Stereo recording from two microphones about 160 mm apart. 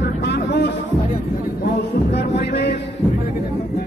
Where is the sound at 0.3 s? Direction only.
90° left.